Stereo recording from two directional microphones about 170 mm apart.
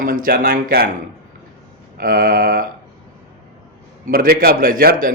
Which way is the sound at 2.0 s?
60° right (ahead or behind).